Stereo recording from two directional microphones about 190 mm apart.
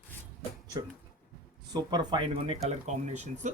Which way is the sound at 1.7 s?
25° right (ahead or behind).